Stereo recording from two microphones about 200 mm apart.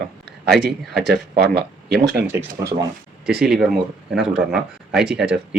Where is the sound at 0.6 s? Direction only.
50° right (ahead or behind).